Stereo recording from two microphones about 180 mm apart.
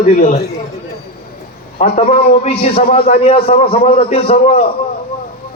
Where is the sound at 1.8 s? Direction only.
30° left (ahead or behind).